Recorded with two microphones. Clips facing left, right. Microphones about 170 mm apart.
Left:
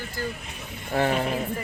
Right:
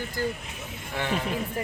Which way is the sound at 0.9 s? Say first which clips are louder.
Left 6 dB; 40° left (ahead or behind).